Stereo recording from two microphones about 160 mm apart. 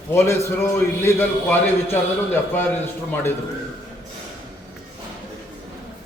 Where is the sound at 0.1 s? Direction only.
15° left (ahead or behind).